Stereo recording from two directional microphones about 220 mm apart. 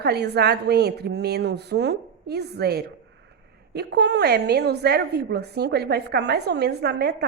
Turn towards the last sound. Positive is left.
turn(degrees=-45)  # may be behind; listen again after turning